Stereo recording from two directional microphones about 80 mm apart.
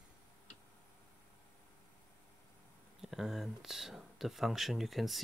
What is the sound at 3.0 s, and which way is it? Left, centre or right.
Speech, centre.